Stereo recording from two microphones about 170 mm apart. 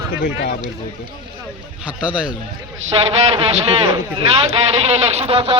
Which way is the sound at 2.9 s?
30° right (ahead or behind).